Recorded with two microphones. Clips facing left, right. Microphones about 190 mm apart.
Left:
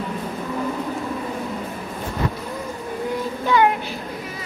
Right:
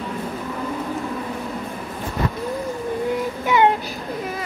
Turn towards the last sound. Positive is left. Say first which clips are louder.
# right 1 dB
turn(degrees=-20)  # may be behind; listen again after turning